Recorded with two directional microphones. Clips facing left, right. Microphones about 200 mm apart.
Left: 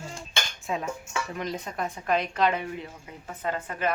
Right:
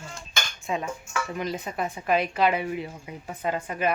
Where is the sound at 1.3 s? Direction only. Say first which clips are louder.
Right 2 dB; 5° right (ahead or behind).